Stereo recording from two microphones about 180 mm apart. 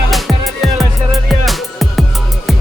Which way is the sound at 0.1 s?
Centre (ahead or behind).